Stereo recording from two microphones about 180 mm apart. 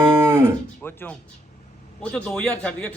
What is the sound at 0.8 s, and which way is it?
A man's voice, 10° left (ahead or behind).